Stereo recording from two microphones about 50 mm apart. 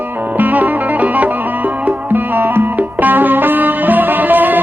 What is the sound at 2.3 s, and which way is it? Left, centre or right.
Music, right.